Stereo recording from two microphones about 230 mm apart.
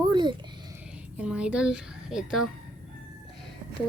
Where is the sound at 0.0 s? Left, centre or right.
Centre.